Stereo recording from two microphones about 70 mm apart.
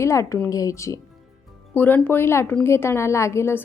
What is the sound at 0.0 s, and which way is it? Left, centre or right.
Speech, left.